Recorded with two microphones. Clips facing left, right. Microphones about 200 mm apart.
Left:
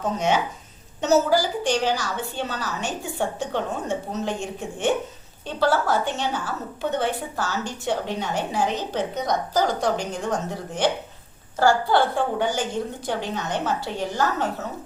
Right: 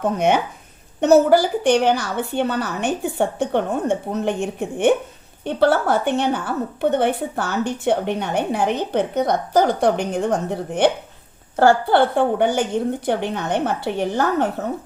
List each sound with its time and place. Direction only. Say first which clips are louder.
0.0 s a woman's voice: right 4 dB; 60° right (ahead or behind)